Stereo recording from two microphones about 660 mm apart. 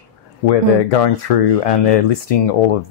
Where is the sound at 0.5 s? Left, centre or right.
Left.